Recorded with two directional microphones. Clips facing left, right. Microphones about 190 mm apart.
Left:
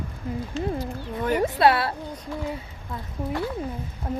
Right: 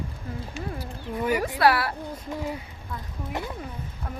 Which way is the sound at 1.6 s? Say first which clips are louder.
Left 1 dB; 25° left (ahead or behind).